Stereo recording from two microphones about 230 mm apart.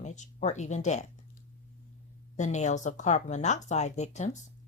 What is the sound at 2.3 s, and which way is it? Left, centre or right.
A woman's voice, left.